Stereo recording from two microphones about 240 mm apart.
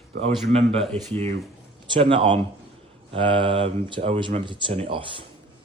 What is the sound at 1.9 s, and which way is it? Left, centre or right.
Speech, right.